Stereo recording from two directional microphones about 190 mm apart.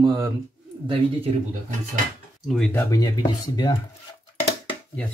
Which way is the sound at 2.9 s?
20° left (ahead or behind).